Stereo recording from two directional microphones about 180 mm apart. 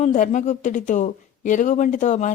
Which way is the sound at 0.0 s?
45° left (ahead or behind).